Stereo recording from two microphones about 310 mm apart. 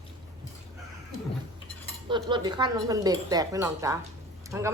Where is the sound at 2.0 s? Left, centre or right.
Centre.